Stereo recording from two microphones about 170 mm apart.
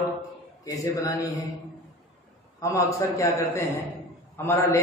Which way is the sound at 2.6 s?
20° left (ahead or behind).